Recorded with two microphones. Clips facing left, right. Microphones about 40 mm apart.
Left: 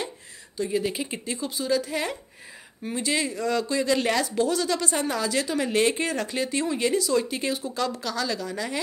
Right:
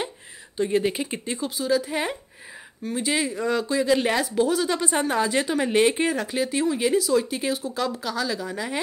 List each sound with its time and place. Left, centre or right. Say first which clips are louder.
0.6 s speech: right 4 dB; right
0.9 s speech: right 2 dB; centre
1.9 s speech: right 2 dB; right
3.0 s speech: right 1 dB; centre
6.1 s speech: right 2 dB; centre